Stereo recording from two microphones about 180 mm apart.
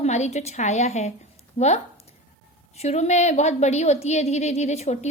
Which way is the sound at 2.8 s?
40° left (ahead or behind).